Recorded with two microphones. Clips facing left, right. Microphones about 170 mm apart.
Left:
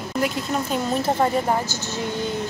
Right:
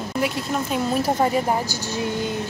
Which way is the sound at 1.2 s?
15° right (ahead or behind).